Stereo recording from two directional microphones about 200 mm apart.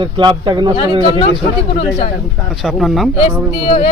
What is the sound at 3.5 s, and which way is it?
Speech, 30° left (ahead or behind).